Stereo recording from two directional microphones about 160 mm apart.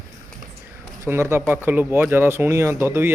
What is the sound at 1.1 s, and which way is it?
A man's voice, 15° right (ahead or behind).